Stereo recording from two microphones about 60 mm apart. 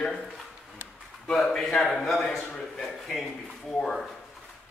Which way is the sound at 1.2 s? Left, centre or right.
Centre.